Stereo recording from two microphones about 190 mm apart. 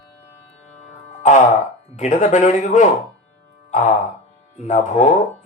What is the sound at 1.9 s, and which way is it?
Speech, 40° left (ahead or behind).